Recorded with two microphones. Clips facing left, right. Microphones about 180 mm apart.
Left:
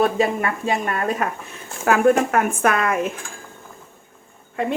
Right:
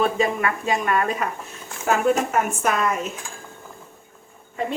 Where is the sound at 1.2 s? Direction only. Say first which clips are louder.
Left 2 dB; 55° left (ahead or behind).